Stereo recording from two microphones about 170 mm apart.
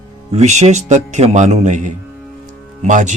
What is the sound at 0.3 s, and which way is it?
Speech, 40° right (ahead or behind).